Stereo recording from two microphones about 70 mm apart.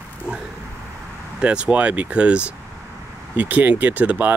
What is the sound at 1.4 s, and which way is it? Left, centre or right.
Speech, centre.